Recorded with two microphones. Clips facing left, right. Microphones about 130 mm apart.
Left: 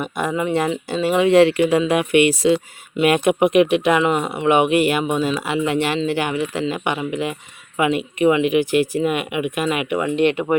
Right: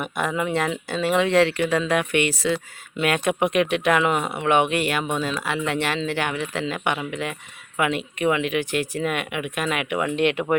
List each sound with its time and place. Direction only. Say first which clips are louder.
0.0 s speech: left 3 dB; centre (ahead or behind)